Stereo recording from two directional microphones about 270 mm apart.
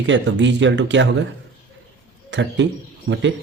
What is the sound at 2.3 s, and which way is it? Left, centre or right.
Speech, right.